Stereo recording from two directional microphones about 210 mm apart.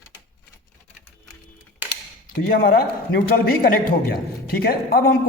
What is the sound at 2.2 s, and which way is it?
A man's voice, 45° left (ahead or behind).